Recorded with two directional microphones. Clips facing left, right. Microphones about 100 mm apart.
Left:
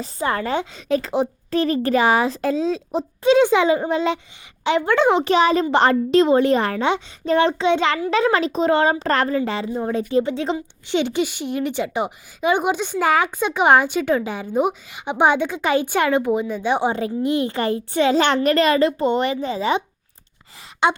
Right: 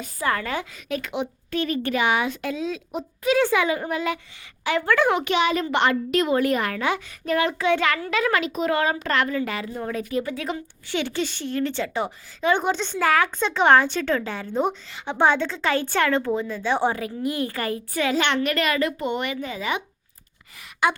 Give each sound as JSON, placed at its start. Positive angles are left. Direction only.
{"t": 0.0, "sound": "a woman's voice", "side_deg": 30}
{"t": 5.3, "sound": "a woman's voice", "side_deg": 35}
{"t": 20.8, "sound": "a woman's voice", "side_deg": 25}